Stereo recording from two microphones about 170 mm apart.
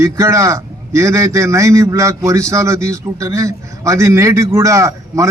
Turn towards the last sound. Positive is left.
turn(degrees=-20)  # may be behind; listen again after turning